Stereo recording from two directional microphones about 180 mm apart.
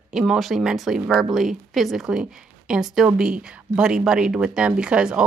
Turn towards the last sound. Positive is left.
turn(degrees=-5)  # may be behind; listen again after turning